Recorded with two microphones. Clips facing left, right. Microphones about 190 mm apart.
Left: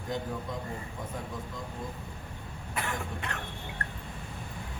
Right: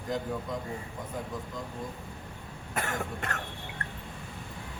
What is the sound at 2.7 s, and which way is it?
Cough, 45° right (ahead or behind).